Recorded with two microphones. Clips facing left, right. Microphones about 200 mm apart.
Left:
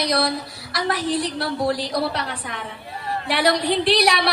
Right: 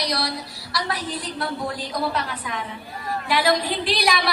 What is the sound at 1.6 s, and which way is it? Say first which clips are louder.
A woman's voice: left 5 dB; 75° left (ahead or behind).